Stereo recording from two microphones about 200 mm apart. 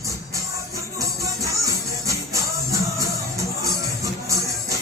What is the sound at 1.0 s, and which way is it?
Music, 15° right (ahead or behind).